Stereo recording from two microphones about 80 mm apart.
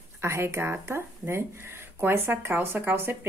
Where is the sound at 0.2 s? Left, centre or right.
Right.